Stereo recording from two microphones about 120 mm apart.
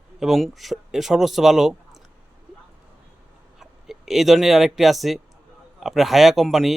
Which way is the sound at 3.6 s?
Centre (ahead or behind).